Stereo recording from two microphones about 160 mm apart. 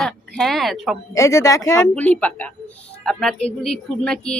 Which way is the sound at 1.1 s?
20° left (ahead or behind).